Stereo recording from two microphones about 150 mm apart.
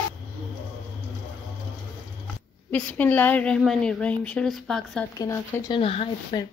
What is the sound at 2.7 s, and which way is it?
Speech, 10° left (ahead or behind).